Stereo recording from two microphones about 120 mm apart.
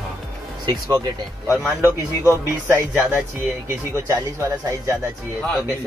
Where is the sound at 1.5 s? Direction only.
15° right (ahead or behind).